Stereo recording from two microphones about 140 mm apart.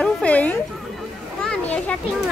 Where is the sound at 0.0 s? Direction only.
10° left (ahead or behind).